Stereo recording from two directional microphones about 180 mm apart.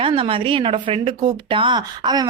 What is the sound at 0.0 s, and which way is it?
A woman's voice, 30° right (ahead or behind).